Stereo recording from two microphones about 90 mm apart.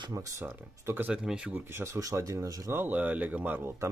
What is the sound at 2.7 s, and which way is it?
Speech, 20° right (ahead or behind).